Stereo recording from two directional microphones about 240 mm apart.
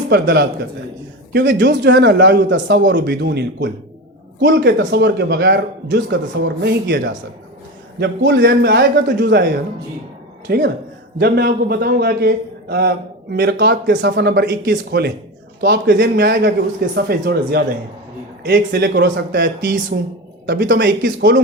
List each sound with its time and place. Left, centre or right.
0.1 s a man's voice: right